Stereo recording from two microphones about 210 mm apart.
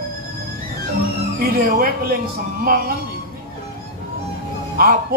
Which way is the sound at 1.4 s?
45° right (ahead or behind).